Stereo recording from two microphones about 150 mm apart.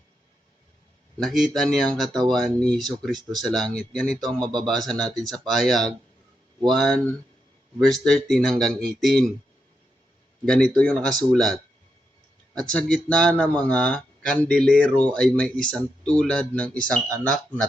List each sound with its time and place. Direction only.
1.2 s speech: centre (ahead or behind)
10.4 s speech: 5° left (ahead or behind)
12.7 s speech: 5° left (ahead or behind)